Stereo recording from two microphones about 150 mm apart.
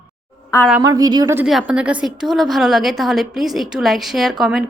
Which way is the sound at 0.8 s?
25° right (ahead or behind).